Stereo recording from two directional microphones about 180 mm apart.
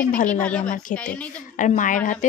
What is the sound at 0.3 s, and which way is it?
Speech, 5° left (ahead or behind).